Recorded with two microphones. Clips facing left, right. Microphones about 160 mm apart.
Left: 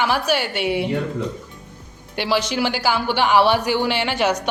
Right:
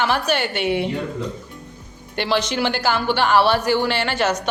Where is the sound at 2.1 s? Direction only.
10° left (ahead or behind).